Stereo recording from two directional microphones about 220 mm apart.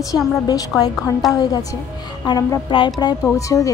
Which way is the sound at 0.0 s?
15° left (ahead or behind).